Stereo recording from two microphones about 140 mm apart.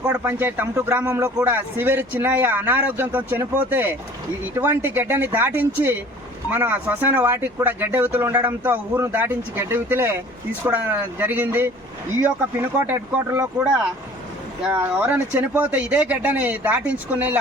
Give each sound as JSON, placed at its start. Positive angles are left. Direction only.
{"t": 0.1, "sound": "speech", "side_deg": -15}
{"t": 14.7, "sound": "speech", "side_deg": -15}